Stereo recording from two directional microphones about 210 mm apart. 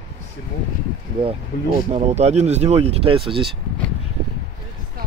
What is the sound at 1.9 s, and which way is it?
Speech, 30° right (ahead or behind).